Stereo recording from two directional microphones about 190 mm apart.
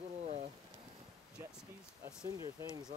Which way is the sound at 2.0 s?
5° right (ahead or behind).